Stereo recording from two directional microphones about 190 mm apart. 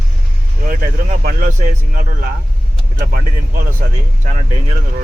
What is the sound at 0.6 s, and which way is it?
Speech, 45° right (ahead or behind).